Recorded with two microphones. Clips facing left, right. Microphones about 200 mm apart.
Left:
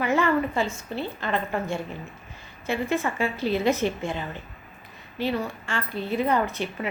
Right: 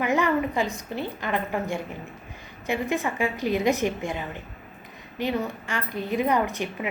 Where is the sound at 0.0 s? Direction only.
15° right (ahead or behind).